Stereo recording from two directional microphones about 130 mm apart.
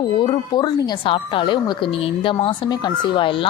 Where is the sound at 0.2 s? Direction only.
35° left (ahead or behind).